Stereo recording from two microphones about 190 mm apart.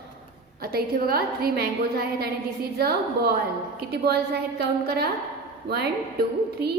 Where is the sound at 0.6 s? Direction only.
55° right (ahead or behind).